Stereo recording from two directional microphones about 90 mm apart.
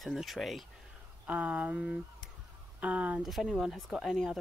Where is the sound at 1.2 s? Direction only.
15° right (ahead or behind).